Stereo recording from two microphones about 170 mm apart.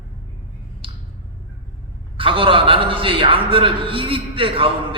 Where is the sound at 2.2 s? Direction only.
30° right (ahead or behind).